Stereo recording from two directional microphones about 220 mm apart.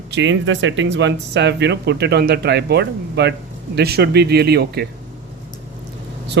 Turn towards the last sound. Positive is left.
turn(degrees=-55)  # may be behind; listen again after turning